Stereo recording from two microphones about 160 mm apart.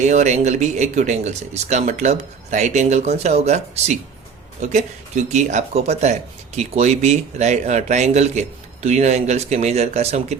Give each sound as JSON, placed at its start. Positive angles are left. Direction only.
{"t": 0.0, "sound": "speech", "side_deg": -45}